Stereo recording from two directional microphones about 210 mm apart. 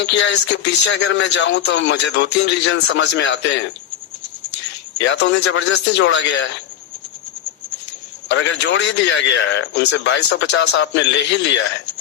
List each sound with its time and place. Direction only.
0.0 s speech: 55° left (ahead or behind)
4.9 s speech: 60° left (ahead or behind)
8.3 s speech: 60° left (ahead or behind)